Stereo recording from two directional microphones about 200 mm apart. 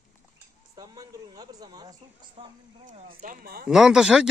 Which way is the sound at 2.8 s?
40° right (ahead or behind).